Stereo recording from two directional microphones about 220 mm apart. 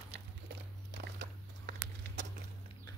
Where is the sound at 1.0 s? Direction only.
50° right (ahead or behind).